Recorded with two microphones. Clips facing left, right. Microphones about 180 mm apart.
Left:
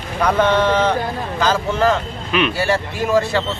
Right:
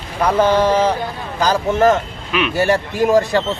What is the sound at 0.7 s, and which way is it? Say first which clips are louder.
Speech: right 1 dB; 30° right (ahead or behind).